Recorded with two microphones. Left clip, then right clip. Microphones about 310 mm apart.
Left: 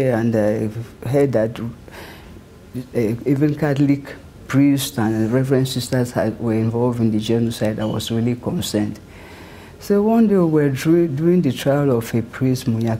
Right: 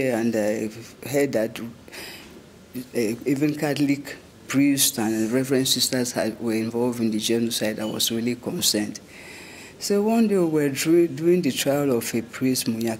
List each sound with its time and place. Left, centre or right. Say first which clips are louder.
0.0 s a man's voice: left 5 dB; left